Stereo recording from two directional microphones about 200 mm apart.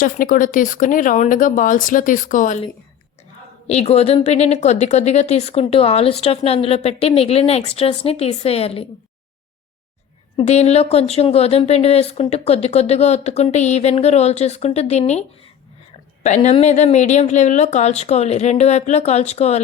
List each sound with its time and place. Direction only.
0.0 s speech: 45° left (ahead or behind)
3.7 s speech: 30° left (ahead or behind)
10.3 s speech: 30° left (ahead or behind)
16.2 s speech: 35° left (ahead or behind)